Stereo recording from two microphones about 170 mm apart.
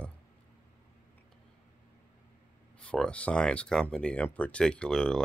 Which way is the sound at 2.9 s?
5° left (ahead or behind).